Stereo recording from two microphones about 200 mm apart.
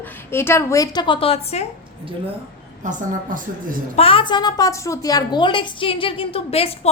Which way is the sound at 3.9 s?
30° left (ahead or behind).